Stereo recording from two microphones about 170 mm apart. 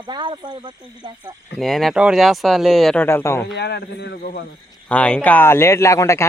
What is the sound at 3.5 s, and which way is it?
Speech, 80° left.